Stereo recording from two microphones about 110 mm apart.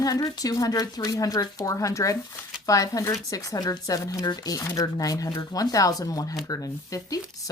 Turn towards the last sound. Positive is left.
turn(degrees=30)  # may be behind; listen again after turning